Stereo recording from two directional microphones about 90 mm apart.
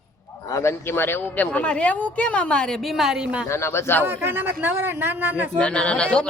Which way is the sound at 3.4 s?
30° left (ahead or behind).